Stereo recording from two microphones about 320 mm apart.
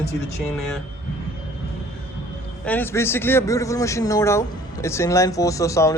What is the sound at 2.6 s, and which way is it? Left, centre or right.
A man's voice, centre.